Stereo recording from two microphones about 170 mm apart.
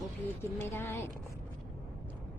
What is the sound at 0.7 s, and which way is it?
Speech, 15° left (ahead or behind).